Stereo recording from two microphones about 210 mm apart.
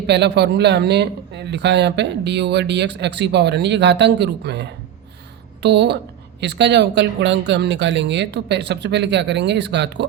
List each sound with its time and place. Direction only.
0.1 s speech: 55° right (ahead or behind)